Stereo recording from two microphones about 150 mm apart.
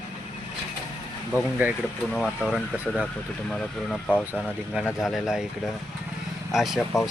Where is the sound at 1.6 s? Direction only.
10° right (ahead or behind).